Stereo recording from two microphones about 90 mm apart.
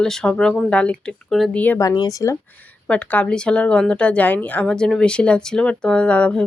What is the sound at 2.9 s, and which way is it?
A woman's voice, 15° left (ahead or behind).